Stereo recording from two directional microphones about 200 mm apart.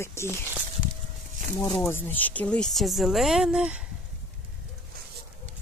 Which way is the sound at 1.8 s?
10° left (ahead or behind).